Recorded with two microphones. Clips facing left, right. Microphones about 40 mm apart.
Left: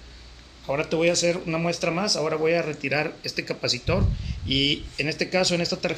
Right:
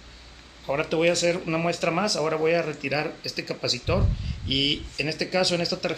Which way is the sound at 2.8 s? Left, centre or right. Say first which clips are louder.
Left 2 dB; centre.